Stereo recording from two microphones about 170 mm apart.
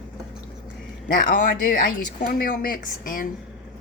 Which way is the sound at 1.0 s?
55° left (ahead or behind).